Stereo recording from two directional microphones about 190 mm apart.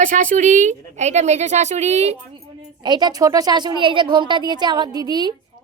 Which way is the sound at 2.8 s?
20° right (ahead or behind).